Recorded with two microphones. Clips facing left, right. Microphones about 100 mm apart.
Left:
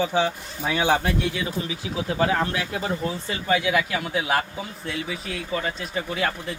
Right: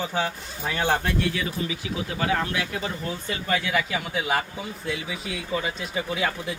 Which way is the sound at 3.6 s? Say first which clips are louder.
Left 3 dB; centre (ahead or behind).